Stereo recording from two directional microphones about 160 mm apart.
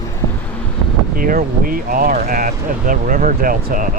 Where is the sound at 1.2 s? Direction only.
60° right (ahead or behind).